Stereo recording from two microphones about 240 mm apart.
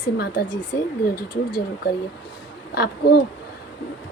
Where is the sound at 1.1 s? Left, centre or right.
Left.